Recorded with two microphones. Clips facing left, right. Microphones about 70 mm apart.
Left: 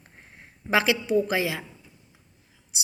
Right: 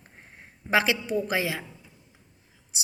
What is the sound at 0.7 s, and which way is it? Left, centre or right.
Speech, right.